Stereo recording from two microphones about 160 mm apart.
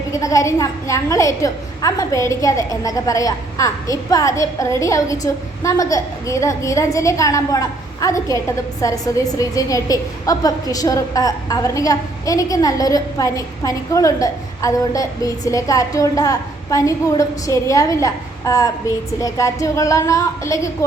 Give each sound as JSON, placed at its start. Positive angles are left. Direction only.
{"t": 0.1, "sound": "a woman's voice", "side_deg": 20}